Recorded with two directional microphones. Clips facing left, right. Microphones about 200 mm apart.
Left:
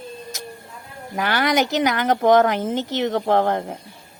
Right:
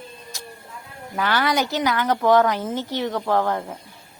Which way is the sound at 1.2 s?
20° left (ahead or behind).